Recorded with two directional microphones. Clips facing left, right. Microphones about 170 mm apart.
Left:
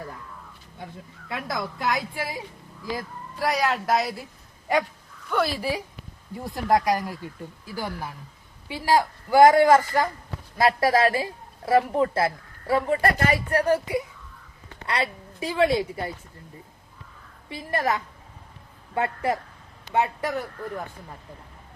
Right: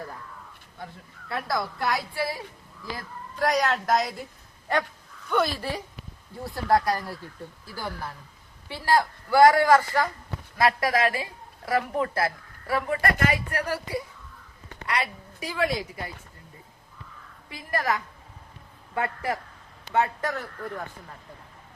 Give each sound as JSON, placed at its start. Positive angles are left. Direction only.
{"t": 1.3, "sound": "a woman's voice", "side_deg": 20}
{"t": 2.9, "sound": "a woman's voice", "side_deg": 5}
{"t": 14.8, "sound": "a woman's voice", "side_deg": 30}
{"t": 17.5, "sound": "a woman's voice", "side_deg": 25}